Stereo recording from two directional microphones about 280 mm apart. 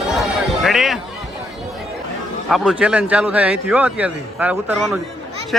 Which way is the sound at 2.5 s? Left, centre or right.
Centre.